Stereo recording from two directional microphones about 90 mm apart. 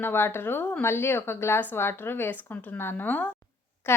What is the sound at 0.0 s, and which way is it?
A woman's voice, 25° left (ahead or behind).